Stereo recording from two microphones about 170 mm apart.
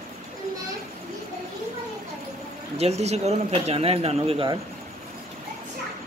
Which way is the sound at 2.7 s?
40° right (ahead or behind).